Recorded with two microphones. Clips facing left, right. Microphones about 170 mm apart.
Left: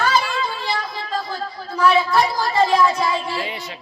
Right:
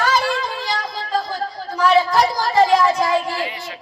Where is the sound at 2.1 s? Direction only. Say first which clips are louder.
Right 1 dB; 40° right (ahead or behind).